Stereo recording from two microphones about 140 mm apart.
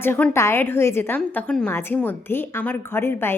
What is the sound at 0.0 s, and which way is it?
A woman's voice, 15° left (ahead or behind).